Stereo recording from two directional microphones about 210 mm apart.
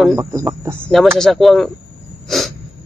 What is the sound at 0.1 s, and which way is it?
Speech, 15° right (ahead or behind).